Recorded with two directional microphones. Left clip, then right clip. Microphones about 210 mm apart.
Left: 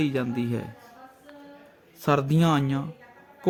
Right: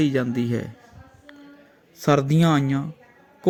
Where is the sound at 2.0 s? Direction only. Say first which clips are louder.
Right 3 dB; 10° right (ahead or behind).